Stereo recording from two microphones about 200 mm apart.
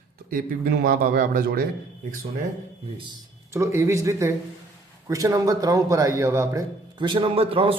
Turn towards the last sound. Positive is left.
turn(degrees=-30)  # may be behind; listen again after turning